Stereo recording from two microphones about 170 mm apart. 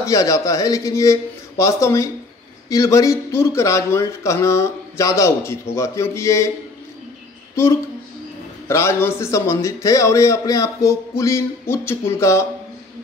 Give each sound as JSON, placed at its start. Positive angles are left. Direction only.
{"t": 0.0, "sound": "a man's voice", "side_deg": 20}
{"t": 8.6, "sound": "a man's voice", "side_deg": 15}